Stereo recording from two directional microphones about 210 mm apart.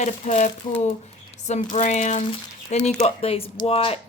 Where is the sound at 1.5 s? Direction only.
35° left (ahead or behind).